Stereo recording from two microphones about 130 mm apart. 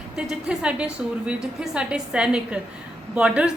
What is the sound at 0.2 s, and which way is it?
A woman's voice, 5° right (ahead or behind).